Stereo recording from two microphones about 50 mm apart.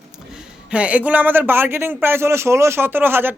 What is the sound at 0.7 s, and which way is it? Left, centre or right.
Speech, right.